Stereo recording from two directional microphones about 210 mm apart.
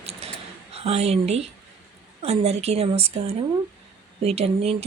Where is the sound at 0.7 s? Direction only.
30° right (ahead or behind).